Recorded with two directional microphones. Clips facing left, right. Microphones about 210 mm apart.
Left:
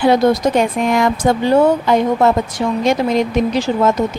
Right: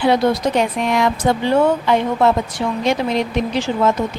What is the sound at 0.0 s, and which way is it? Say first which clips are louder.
Speech: left 3 dB; 45° left (ahead or behind).